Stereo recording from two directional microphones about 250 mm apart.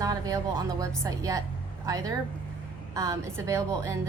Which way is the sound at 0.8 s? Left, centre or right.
Centre.